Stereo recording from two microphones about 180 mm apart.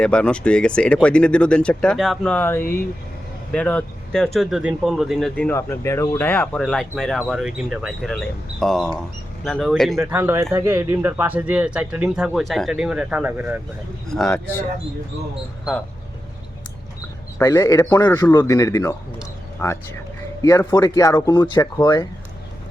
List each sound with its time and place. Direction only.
0.0 s speech: 5° left (ahead or behind)
5.5 s speech: 15° left (ahead or behind)
10.0 s speech: 15° right (ahead or behind)
17.3 s speech: 20° left (ahead or behind)